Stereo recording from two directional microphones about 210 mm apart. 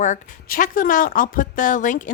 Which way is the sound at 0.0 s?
40° left (ahead or behind).